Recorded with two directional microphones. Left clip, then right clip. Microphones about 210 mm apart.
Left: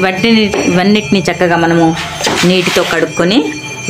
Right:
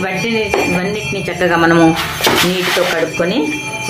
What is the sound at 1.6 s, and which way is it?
Speech, 10° left (ahead or behind).